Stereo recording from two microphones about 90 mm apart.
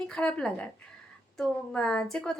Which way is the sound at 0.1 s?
10° left (ahead or behind).